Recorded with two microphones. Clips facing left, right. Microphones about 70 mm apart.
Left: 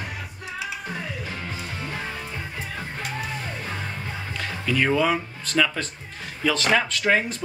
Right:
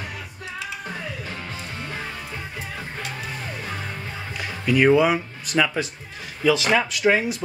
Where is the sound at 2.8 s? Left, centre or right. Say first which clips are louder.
Left 3 dB; centre.